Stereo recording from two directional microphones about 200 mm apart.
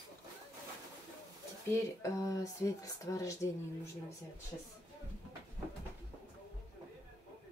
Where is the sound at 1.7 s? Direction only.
15° left (ahead or behind).